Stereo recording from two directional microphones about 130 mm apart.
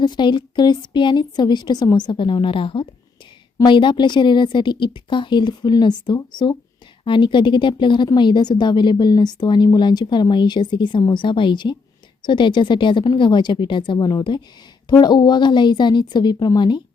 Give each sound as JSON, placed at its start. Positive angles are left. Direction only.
{"t": 0.0, "sound": "a woman's voice", "side_deg": 35}